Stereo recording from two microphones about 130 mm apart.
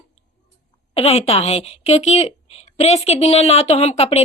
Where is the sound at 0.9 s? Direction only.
50° left (ahead or behind).